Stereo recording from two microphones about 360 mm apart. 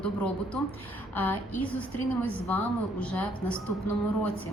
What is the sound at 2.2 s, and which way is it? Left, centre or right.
A woman's voice, centre.